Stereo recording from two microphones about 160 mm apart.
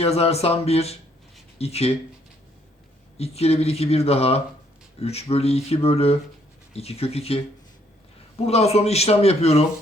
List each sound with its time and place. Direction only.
0.0 s speech: 40° left (ahead or behind)
3.2 s speech: 40° left (ahead or behind)
8.4 s speech: 40° left (ahead or behind)